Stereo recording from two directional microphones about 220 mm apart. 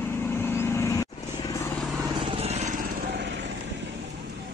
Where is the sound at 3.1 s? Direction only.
50° right (ahead or behind).